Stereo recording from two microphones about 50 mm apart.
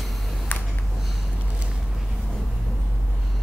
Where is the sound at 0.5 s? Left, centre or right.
Left.